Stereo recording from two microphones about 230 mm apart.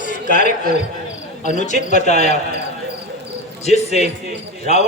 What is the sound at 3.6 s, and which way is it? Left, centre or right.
Speech, left.